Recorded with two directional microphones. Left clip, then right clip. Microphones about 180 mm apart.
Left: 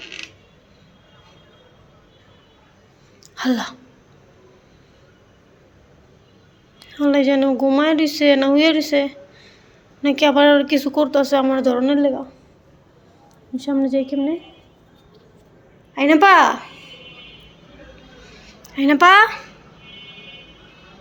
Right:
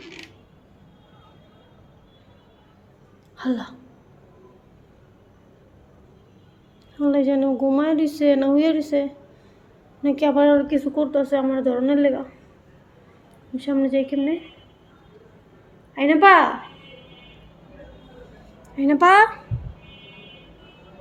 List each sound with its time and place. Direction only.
3.3 s speech: 10° left (ahead or behind)
6.9 s a woman's voice: centre (ahead or behind)
13.6 s a woman's voice: 20° left (ahead or behind)
16.0 s speech: 20° left (ahead or behind)
18.6 s speech: centre (ahead or behind)